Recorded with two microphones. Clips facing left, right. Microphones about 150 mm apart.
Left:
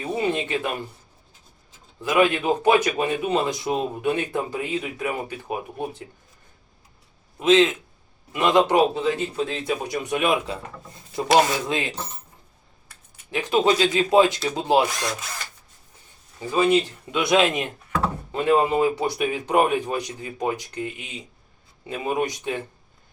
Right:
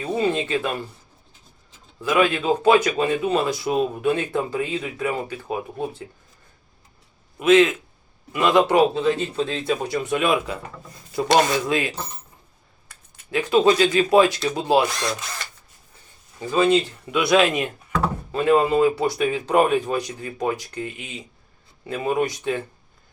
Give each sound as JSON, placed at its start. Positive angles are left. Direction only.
{"t": 0.0, "sound": "speech", "side_deg": 20}
{"t": 2.0, "sound": "speech", "side_deg": 20}
{"t": 7.3, "sound": "speech", "side_deg": 20}
{"t": 11.7, "sound": "speech", "side_deg": 20}
{"t": 13.3, "sound": "speech", "side_deg": 20}
{"t": 14.8, "sound": "speech", "side_deg": 5}
{"t": 16.4, "sound": "speech", "side_deg": 15}